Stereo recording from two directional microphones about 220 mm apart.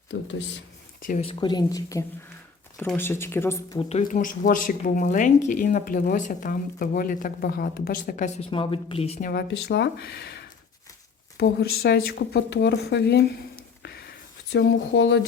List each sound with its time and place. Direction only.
0.1 s speech: 55° left (ahead or behind)
1.0 s speech: 30° left (ahead or behind); by 3.8 s 10° left (ahead or behind)
3.8 s speech: 30° left (ahead or behind)
9.3 s speech: 50° left (ahead or behind)
14.5 s speech: 55° left (ahead or behind)